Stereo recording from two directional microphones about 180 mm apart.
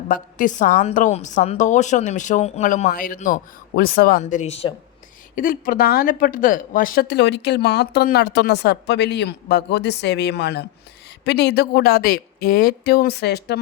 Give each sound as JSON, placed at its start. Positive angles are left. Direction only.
{"t": 0.1, "sound": "speech", "side_deg": 50}
{"t": 4.2, "sound": "speech", "side_deg": 40}
{"t": 5.3, "sound": "a woman's voice", "side_deg": 50}